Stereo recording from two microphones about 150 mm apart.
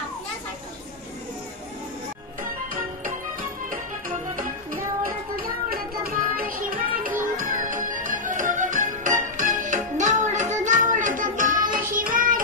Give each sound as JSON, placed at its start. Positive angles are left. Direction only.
{"t": 5.0, "sound": "child singing", "side_deg": -70}
{"t": 7.0, "sound": "music", "side_deg": -65}